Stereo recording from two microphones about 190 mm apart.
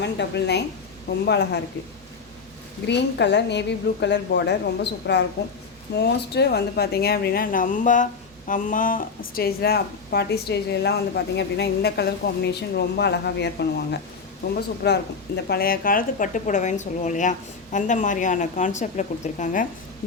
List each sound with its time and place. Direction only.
0.0 s speech: 65° left (ahead or behind)
2.8 s speech: 65° left (ahead or behind); by 19.6 s 40° left (ahead or behind)